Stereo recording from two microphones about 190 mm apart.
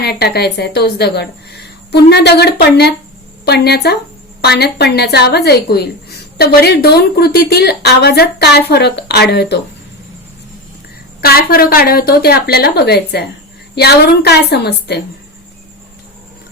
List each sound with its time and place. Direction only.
0.0 s a woman's voice: 55° left (ahead or behind)
11.2 s a woman's voice: 55° left (ahead or behind)